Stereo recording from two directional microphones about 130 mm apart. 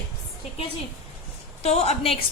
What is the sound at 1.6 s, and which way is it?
Speech, 55° left (ahead or behind).